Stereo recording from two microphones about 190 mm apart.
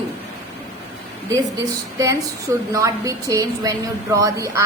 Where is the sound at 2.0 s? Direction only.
15° right (ahead or behind).